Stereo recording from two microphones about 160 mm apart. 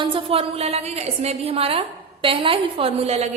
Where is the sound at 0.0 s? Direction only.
35° right (ahead or behind).